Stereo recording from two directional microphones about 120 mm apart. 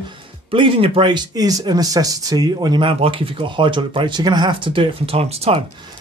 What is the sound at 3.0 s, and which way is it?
Speech, 50° right (ahead or behind).